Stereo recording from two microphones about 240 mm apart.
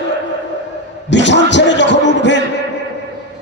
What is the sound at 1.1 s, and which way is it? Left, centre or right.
Speech, left.